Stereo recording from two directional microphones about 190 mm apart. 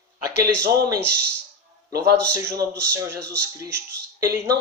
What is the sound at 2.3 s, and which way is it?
Speech, 15° right (ahead or behind).